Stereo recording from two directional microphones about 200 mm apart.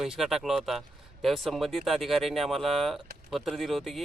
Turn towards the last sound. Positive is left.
turn(degrees=0)  # may be behind; listen again after turning